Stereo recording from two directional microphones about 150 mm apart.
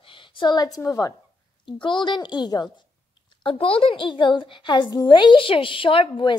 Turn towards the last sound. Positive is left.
turn(degrees=35)  # may be behind; listen again after turning